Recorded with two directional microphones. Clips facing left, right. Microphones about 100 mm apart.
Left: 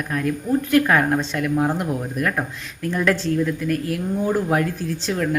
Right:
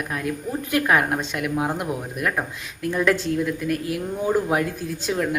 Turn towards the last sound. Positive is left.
turn(degrees=-15)  # may be behind; listen again after turning